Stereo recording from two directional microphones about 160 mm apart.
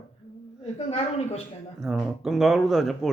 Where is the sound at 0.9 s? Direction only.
40° left (ahead or behind).